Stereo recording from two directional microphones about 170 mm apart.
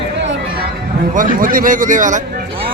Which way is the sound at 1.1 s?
55° right (ahead or behind).